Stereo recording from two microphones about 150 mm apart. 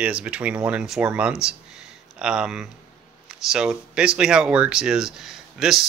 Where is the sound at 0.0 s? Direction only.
10° right (ahead or behind).